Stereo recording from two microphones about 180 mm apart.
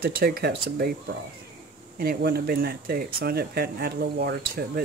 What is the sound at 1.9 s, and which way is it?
Speech, 60° right (ahead or behind).